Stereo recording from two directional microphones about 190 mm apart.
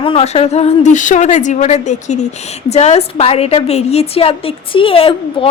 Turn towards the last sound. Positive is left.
turn(degrees=30)  # may be behind; listen again after turning